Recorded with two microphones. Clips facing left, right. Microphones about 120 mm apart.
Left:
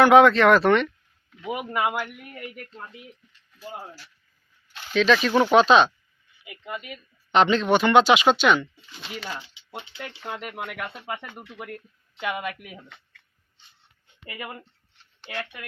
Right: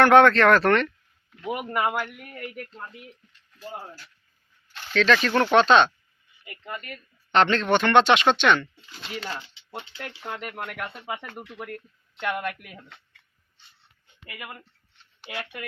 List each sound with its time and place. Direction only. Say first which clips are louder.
0.0 s speech: left 1 dB; 5° left (ahead or behind)
14.3 s speech: left 4 dB; 25° left (ahead or behind)
15.2 s speech: left 1 dB; 10° right (ahead or behind)